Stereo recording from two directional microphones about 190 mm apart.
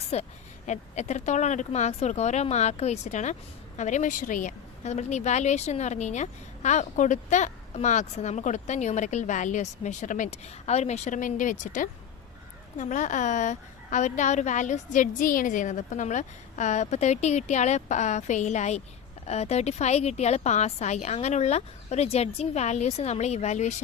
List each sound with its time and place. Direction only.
0.1 s a woman's voice: 35° left (ahead or behind)